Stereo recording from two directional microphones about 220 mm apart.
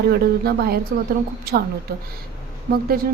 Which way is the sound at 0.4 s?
45° right (ahead or behind).